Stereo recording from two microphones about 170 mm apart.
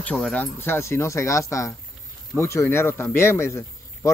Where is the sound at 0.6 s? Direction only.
15° left (ahead or behind).